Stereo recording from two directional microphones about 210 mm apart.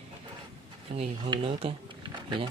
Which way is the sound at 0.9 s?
25° right (ahead or behind).